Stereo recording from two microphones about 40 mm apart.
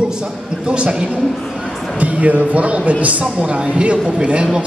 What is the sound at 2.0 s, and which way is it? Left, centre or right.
A man's voice, right.